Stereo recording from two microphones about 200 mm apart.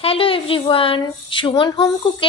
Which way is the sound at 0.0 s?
30° left (ahead or behind).